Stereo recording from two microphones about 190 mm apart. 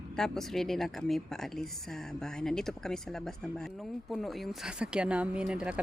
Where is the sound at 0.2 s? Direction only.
Centre (ahead or behind).